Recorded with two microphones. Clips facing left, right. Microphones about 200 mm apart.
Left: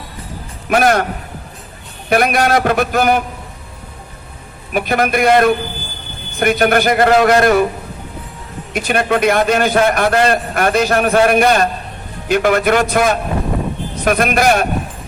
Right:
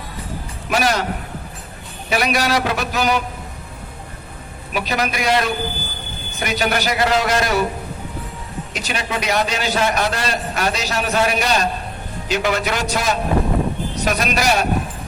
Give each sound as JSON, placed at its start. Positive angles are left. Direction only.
{"t": 0.7, "sound": "a man's voice", "side_deg": 55}
{"t": 2.0, "sound": "a man's voice", "side_deg": 55}
{"t": 4.7, "sound": "a man's voice", "side_deg": 55}
{"t": 8.7, "sound": "a man's voice", "side_deg": 55}